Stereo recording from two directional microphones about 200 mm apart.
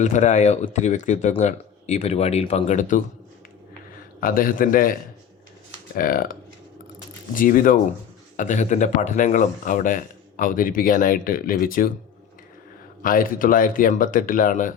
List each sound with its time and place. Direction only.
0.0 s speech: 35° left (ahead or behind)
4.2 s speech: 45° left (ahead or behind)
7.3 s speech: 45° left (ahead or behind)
13.0 s speech: 45° left (ahead or behind)